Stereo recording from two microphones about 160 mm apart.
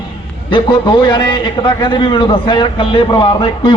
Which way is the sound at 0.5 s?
35° left (ahead or behind).